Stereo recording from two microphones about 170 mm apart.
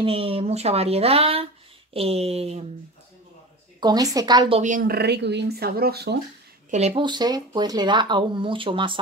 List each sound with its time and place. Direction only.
0.0 s speech: 35° right (ahead or behind)
3.8 s speech: 20° right (ahead or behind)
4.6 s a woman's voice: 50° right (ahead or behind)
4.9 s speech: 80° right
6.7 s speech: 35° right (ahead or behind)